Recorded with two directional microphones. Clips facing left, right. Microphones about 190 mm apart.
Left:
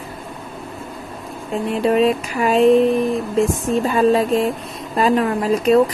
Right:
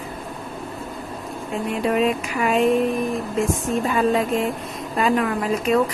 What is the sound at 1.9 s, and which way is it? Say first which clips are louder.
Speech: left 4 dB; 35° left (ahead or behind).